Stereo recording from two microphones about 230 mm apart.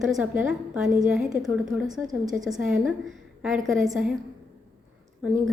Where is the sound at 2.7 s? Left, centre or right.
Centre.